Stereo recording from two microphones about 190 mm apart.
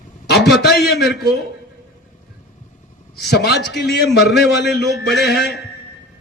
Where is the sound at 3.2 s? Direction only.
60° left (ahead or behind).